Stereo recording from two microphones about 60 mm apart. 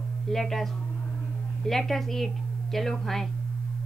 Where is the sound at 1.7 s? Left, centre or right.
Centre.